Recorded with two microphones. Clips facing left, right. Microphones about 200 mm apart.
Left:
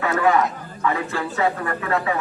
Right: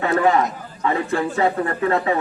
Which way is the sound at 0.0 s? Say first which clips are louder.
Right 1 dB; 30° right (ahead or behind).